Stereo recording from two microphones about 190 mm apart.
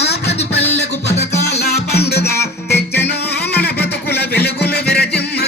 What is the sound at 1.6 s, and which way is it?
Music, 60° left (ahead or behind).